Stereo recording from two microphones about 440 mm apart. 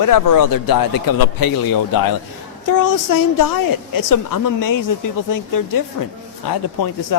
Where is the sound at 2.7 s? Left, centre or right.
Left.